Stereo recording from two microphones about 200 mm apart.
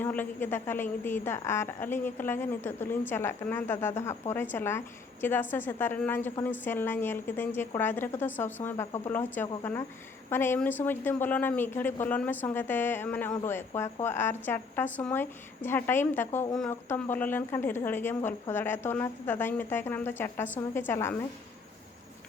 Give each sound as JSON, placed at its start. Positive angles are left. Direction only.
{"t": 0.0, "sound": "a woman's voice", "side_deg": 10}